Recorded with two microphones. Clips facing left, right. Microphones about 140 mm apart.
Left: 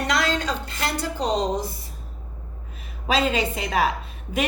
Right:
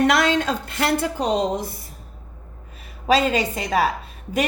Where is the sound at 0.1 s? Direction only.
60° right (ahead or behind).